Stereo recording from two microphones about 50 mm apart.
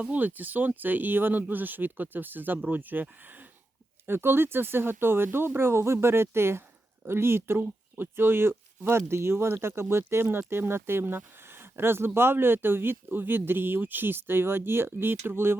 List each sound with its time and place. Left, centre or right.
0.0 s speech: right
4.0 s speech: right